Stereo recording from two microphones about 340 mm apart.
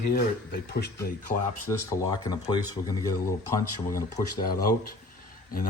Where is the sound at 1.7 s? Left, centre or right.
Centre.